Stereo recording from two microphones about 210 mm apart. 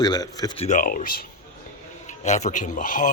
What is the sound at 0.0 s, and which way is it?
Speech, 20° left (ahead or behind).